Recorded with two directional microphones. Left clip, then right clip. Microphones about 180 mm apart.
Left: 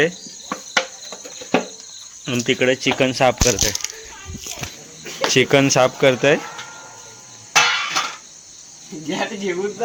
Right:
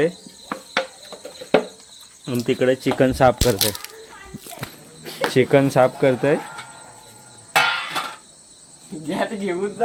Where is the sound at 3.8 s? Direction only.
50° right (ahead or behind).